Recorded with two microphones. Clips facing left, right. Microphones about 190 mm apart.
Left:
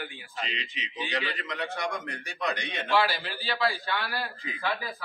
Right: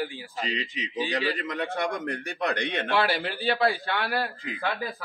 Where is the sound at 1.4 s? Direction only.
50° right (ahead or behind).